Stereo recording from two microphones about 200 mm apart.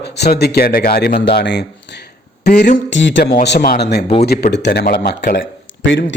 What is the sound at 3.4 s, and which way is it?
Speech, 55° left (ahead or behind).